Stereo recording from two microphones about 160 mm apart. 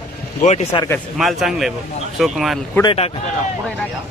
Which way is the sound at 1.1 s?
Centre (ahead or behind).